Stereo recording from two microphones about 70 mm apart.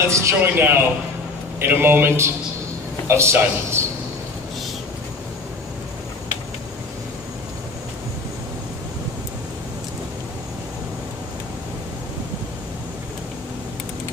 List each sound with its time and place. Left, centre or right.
0.1 s a man's voice: right
0.4 s speech: right